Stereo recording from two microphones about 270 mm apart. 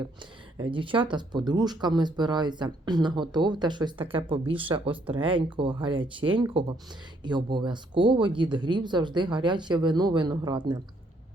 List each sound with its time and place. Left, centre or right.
0.6 s speech: centre